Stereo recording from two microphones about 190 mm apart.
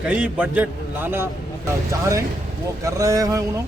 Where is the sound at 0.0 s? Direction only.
5° right (ahead or behind).